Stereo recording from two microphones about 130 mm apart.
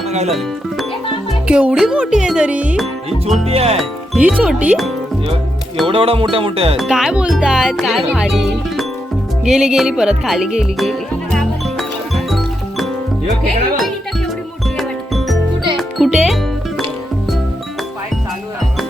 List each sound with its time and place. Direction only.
0.3 s speech: centre (ahead or behind)
1.5 s music: 10° right (ahead or behind)
3.5 s speech: 50° right (ahead or behind)
4.2 s music: 10° right (ahead or behind)
5.8 s speech: 45° right (ahead or behind)
6.7 s speech: centre (ahead or behind)
9.4 s music: 5° right (ahead or behind)
14.8 s music: centre (ahead or behind)